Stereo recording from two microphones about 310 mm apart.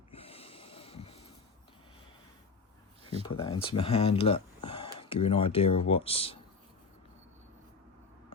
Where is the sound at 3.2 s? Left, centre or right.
Centre.